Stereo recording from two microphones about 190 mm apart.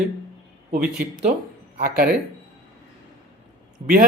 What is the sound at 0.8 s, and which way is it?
Speech, 5° right (ahead or behind).